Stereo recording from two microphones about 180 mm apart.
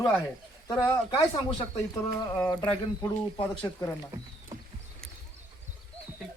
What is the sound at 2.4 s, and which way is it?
Speech, 20° left (ahead or behind).